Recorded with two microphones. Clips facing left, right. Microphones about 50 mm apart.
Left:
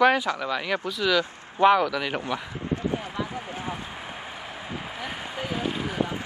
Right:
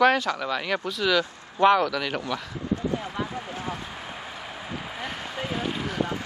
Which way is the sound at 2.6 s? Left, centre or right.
Left.